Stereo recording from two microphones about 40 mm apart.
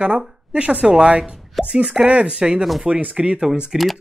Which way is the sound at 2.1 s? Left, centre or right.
Right.